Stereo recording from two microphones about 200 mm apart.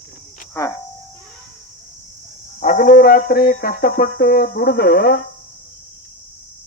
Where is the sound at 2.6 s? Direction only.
40° left (ahead or behind).